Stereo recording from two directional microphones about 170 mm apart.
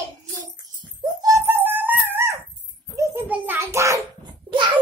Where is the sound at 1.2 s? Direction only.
15° right (ahead or behind).